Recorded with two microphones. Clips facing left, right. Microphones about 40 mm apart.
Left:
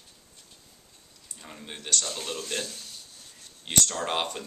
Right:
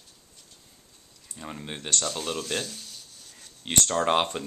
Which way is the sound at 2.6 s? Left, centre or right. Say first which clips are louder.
Even; centre.